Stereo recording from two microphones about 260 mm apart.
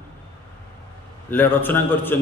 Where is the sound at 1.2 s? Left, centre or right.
Centre.